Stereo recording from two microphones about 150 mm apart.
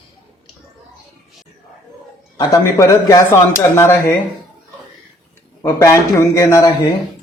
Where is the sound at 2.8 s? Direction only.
20° left (ahead or behind).